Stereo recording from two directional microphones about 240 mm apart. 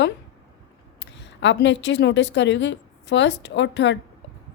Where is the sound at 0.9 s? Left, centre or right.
Left.